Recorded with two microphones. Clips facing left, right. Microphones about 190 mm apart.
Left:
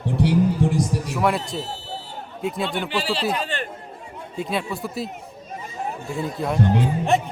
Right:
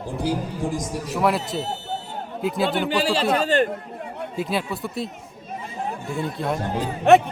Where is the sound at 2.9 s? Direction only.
40° right (ahead or behind).